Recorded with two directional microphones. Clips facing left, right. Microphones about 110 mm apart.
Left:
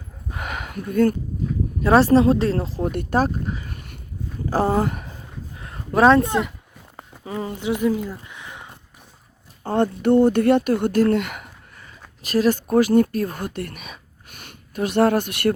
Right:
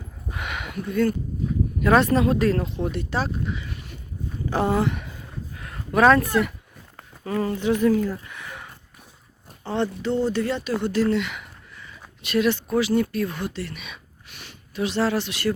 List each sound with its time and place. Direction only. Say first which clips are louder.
0.3 s a sound: left 1 dB; 40° left (ahead or behind)
1.8 s speech: left 4 dB; 30° left (ahead or behind)
2.9 s speech: left 6 dB; 50° left (ahead or behind)
4.4 s speech: left 2 dB; 35° left (ahead or behind)
5.5 s a sound: left 2 dB; 25° left (ahead or behind)
7.1 s speech: right 3 dB; 15° left (ahead or behind)
9.6 s speech: left 6 dB; 50° left (ahead or behind)